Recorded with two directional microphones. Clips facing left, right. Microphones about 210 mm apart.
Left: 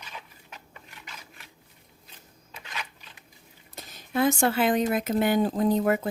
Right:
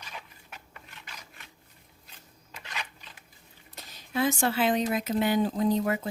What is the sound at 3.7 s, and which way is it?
Speech, 50° left (ahead or behind).